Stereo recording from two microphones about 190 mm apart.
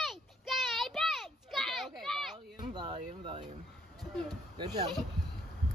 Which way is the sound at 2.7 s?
30° right (ahead or behind).